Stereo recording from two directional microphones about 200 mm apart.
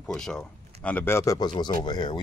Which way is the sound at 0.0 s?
5° left (ahead or behind).